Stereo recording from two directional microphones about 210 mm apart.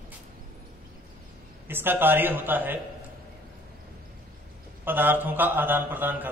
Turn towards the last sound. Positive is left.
turn(degrees=-10)  # may be behind; listen again after turning